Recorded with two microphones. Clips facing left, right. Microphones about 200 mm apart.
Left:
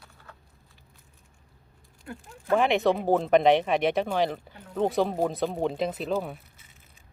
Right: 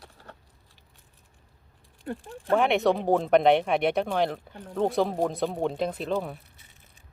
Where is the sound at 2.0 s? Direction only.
35° right (ahead or behind).